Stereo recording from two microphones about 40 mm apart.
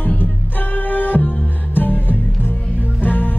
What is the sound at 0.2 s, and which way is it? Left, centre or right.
Music, left.